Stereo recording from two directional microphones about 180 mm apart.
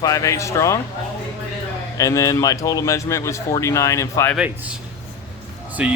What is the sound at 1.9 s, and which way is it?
Speech, 20° left (ahead or behind).